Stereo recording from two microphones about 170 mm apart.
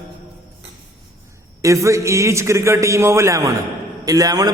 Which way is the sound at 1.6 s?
15° right (ahead or behind).